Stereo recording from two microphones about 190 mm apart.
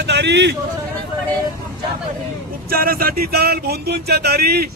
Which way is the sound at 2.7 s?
50° right (ahead or behind).